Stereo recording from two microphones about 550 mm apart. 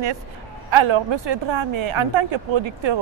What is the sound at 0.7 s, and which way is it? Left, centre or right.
A woman's voice, right.